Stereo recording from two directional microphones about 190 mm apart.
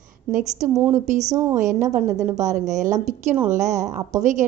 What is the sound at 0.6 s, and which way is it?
A woman's voice, 40° right (ahead or behind).